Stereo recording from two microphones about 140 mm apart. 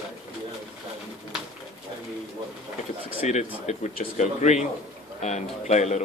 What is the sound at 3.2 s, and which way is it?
Speech, 55° left (ahead or behind).